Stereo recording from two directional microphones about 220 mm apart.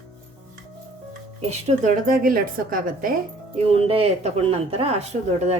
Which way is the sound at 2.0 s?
40° right (ahead or behind).